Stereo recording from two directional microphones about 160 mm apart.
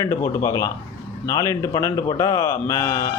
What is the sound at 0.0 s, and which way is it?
Speech, 15° left (ahead or behind).